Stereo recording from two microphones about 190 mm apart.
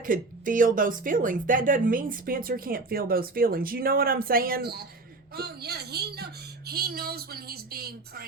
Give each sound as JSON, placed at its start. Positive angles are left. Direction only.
{"t": 0.0, "sound": "speech", "side_deg": -45}